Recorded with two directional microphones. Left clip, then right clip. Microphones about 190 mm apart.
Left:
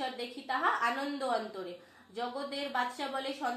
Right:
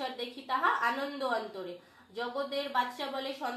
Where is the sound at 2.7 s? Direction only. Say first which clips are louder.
Right 2 dB; 20° left (ahead or behind).